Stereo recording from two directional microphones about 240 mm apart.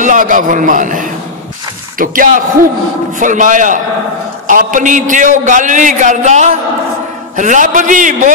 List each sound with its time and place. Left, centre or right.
0.0 s a man's voice: right